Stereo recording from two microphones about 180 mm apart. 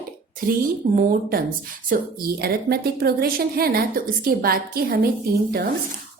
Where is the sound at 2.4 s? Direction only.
60° right (ahead or behind).